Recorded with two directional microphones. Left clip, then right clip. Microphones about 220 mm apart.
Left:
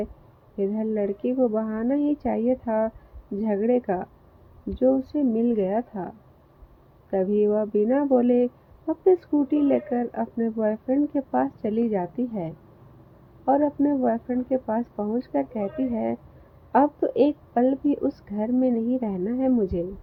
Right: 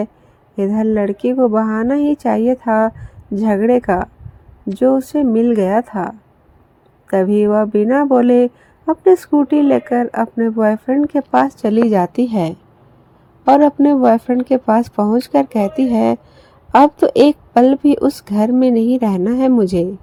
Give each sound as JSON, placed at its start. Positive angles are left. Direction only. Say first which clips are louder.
{"t": 0.5, "sound": "a woman's voice", "louder": "right 9 dB", "side_deg": -25}